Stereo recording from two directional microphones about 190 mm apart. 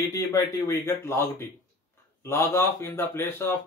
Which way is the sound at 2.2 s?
15° left (ahead or behind).